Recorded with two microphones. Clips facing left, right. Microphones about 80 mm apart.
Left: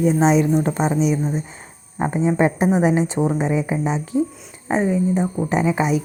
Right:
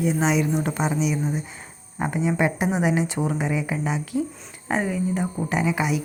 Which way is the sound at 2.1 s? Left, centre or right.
Left.